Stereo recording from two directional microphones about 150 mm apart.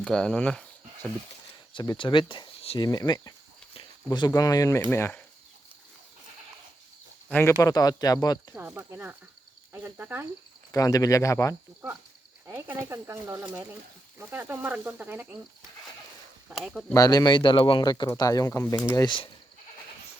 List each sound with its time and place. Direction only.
0.0 s speech: 5° left (ahead or behind)
1.7 s speech: 30° left (ahead or behind)
7.3 s speech: 10° left (ahead or behind)
7.6 s speech: 25° left (ahead or behind)
8.5 s speech: 10° right (ahead or behind)
10.7 s speech: 25° left (ahead or behind)
12.5 s speech: 20° right (ahead or behind)
16.5 s speech: centre (ahead or behind)
16.9 s speech: 25° left (ahead or behind)